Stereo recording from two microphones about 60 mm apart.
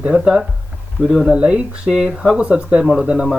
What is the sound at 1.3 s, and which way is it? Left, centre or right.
Speech, centre.